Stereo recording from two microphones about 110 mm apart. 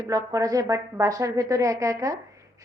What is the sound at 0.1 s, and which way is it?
A woman's voice, 35° right (ahead or behind).